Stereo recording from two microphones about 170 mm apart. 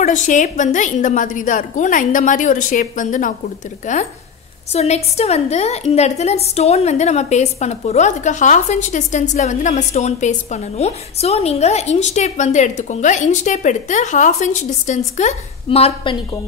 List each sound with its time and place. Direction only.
0.0 s a woman's voice: 45° left (ahead or behind)